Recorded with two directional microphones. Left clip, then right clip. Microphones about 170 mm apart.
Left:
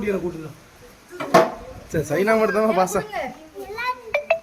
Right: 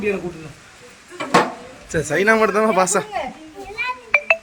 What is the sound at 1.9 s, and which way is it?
A man's voice, centre (ahead or behind).